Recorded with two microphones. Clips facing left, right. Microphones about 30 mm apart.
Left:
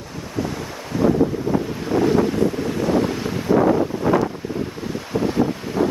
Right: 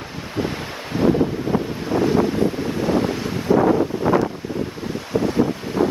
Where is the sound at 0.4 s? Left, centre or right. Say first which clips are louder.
Right 1 dB; right.